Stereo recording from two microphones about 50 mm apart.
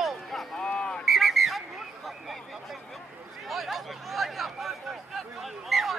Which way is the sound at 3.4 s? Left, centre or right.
Centre.